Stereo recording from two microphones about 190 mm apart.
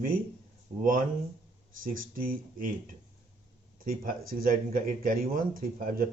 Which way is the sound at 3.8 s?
50° right (ahead or behind).